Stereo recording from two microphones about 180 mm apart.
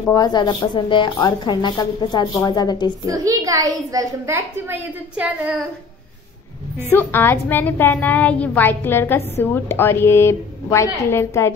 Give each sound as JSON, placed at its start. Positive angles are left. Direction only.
{"t": 0.1, "sound": "a woman's voice", "side_deg": 25}
{"t": 3.1, "sound": "a child's voice", "side_deg": -20}
{"t": 6.9, "sound": "a woman's voice", "side_deg": 10}